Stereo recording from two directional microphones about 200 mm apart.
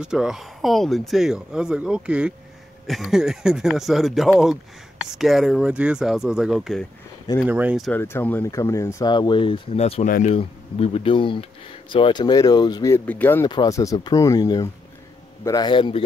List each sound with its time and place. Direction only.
0.0 s speech: 5° right (ahead or behind)
7.9 s speech: 10° left (ahead or behind); by 10.0 s 30° left (ahead or behind)
10.0 s speech: 40° left (ahead or behind)
10.3 s speech: 30° left (ahead or behind)